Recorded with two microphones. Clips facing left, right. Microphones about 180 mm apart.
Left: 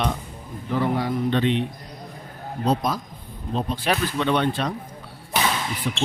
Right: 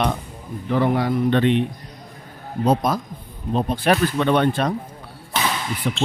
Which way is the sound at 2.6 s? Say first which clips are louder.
Right 4 dB; 55° right (ahead or behind).